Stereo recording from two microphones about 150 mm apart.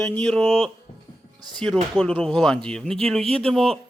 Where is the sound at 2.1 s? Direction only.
5° left (ahead or behind).